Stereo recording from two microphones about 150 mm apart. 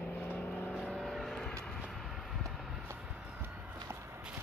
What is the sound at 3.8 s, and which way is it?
Walk, 15° right (ahead or behind).